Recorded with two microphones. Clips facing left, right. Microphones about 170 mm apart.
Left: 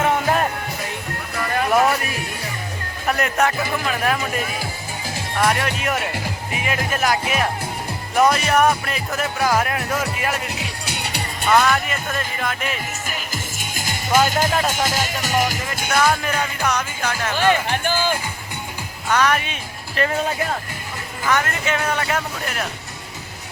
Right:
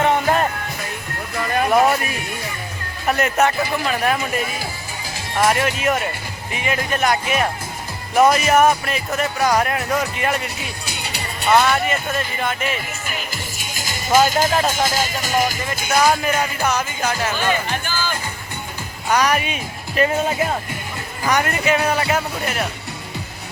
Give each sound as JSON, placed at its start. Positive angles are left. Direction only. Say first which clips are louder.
{"t": 0.0, "sound": "music", "louder": "right 2 dB", "side_deg": 0}
{"t": 3.1, "sound": "speech", "louder": "right 2 dB", "side_deg": 0}
{"t": 10.6, "sound": "music", "louder": "left 1 dB", "side_deg": 75}
{"t": 11.4, "sound": "speech", "louder": "right 1 dB", "side_deg": 0}
{"t": 13.1, "sound": "music", "louder": "even", "side_deg": 50}
{"t": 14.1, "sound": "speech", "louder": "right 2 dB", "side_deg": -5}
{"t": 14.7, "sound": "music", "louder": "right 2 dB", "side_deg": 70}
{"t": 15.9, "sound": "speech", "louder": "right 2 dB", "side_deg": -10}
{"t": 17.3, "sound": "speech", "louder": "left 3 dB", "side_deg": 55}
{"t": 19.0, "sound": "speech", "louder": "right 1 dB", "side_deg": -15}
{"t": 21.2, "sound": "speech", "louder": "right 3 dB", "side_deg": -15}